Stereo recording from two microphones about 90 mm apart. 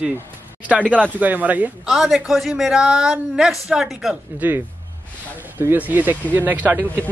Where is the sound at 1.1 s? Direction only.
20° right (ahead or behind).